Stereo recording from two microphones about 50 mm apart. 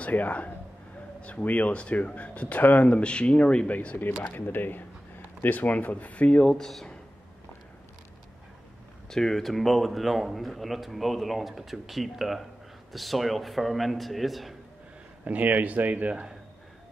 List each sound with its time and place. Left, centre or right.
0.0 s speech: left
6.5 s speech: centre
9.1 s speech: centre
15.2 s speech: right
16.1 s speech: centre